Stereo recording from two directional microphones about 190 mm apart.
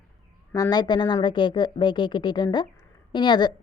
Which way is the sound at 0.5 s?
20° left (ahead or behind).